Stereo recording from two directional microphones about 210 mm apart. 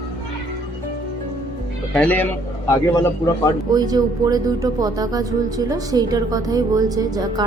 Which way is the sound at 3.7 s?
20° right (ahead or behind).